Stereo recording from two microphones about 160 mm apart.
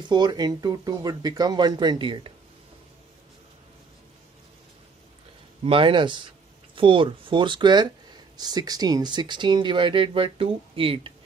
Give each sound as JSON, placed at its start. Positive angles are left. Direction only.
{"t": 0.1, "sound": "speech", "side_deg": -25}
{"t": 5.6, "sound": "speech", "side_deg": -35}